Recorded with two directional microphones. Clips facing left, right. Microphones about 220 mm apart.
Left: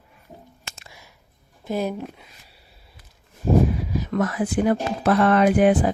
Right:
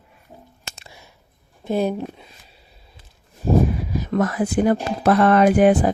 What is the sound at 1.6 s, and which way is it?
Speech, 30° right (ahead or behind).